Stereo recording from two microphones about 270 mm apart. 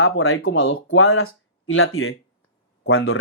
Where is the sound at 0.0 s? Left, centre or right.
Left.